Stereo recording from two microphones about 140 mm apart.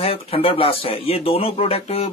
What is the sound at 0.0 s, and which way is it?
Speech, 45° left (ahead or behind).